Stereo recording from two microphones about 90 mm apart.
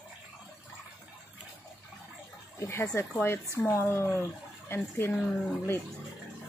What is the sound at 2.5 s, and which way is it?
Speech, 30° left (ahead or behind).